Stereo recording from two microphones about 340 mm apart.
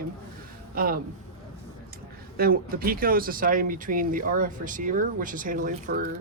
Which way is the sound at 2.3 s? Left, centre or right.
Right.